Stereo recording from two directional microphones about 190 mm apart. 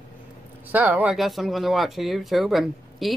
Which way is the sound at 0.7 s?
10° right (ahead or behind).